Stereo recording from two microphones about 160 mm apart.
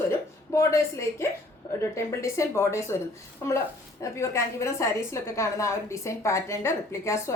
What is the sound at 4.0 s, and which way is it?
A woman's voice, 20° left (ahead or behind).